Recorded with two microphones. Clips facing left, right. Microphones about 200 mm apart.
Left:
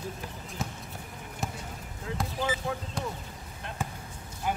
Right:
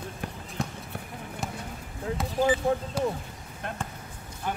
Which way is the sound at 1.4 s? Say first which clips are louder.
Even; centre (ahead or behind).